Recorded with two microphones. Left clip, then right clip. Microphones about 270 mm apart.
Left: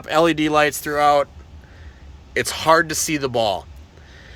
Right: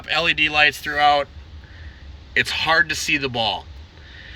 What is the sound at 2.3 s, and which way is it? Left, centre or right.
Speech, centre.